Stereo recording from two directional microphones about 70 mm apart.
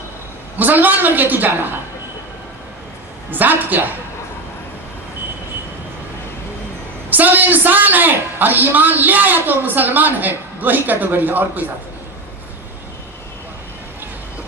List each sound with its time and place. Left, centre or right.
0.6 s a woman's voice: right
3.3 s a woman's voice: right
7.1 s a woman's voice: right